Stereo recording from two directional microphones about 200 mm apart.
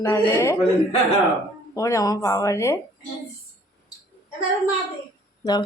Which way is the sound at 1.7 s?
15° left (ahead or behind).